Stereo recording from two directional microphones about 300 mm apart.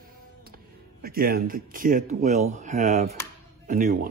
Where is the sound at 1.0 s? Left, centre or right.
Right.